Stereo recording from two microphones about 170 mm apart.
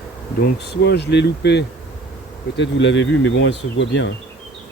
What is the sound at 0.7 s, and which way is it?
Speech, 80° left.